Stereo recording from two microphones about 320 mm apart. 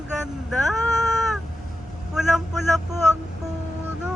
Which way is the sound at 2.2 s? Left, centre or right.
Centre.